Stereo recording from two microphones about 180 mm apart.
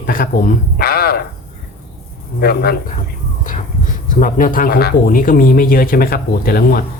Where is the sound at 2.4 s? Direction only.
60° left (ahead or behind).